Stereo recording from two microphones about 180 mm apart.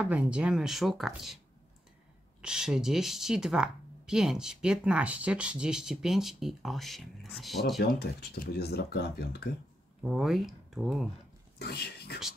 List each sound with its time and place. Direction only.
0.0 s speech: 5° right (ahead or behind)
2.4 s speech: 5° right (ahead or behind)
7.8 s speech: 60° left (ahead or behind)
10.0 s speech: centre (ahead or behind)
11.5 s speech: 60° left (ahead or behind)